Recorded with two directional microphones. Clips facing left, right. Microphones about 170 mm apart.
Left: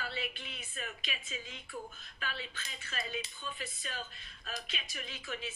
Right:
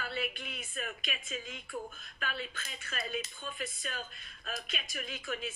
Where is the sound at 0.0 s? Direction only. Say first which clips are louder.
Right 3 dB; 50° right (ahead or behind).